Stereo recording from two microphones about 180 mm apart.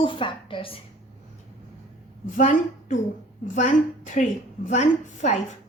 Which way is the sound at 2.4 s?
45° left (ahead or behind).